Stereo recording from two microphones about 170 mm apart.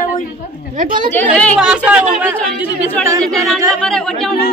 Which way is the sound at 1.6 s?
5° right (ahead or behind).